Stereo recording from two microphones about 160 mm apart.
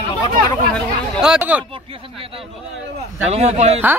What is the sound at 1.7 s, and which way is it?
A man's voice, 35° right (ahead or behind).